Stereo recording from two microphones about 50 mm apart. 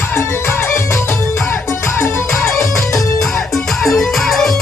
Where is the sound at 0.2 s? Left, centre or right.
Left.